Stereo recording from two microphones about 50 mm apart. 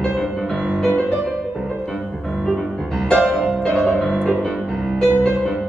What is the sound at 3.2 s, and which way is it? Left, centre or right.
Music, centre.